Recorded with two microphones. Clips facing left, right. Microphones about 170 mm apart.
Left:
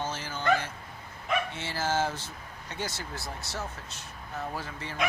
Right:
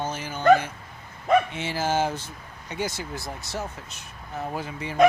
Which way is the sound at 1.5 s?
15° right (ahead or behind).